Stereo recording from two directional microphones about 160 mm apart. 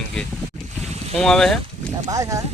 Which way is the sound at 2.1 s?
20° right (ahead or behind).